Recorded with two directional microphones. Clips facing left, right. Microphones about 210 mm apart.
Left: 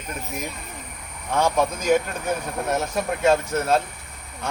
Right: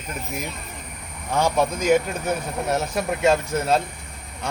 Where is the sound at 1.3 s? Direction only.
10° right (ahead or behind).